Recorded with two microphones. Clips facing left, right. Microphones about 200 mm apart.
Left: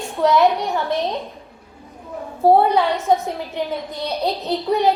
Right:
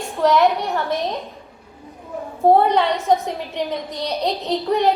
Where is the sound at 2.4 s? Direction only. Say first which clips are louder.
Even; centre (ahead or behind).